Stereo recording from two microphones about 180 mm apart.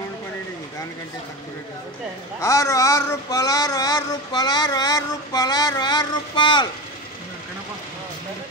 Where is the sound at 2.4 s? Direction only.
20° left (ahead or behind).